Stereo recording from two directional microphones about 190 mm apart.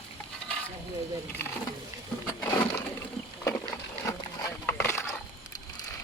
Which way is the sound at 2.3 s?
15° left (ahead or behind).